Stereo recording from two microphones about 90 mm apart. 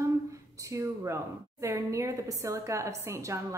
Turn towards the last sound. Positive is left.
turn(degrees=-30)  # may be behind; listen again after turning